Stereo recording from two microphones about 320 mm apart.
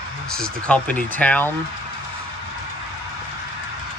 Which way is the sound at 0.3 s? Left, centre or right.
Centre.